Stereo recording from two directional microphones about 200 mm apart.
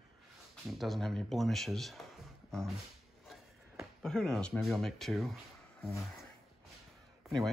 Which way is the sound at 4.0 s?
5° left (ahead or behind).